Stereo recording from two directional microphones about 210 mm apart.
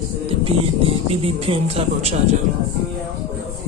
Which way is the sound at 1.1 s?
30° right (ahead or behind).